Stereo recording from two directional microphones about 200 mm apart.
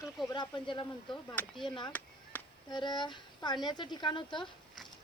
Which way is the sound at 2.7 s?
20° left (ahead or behind).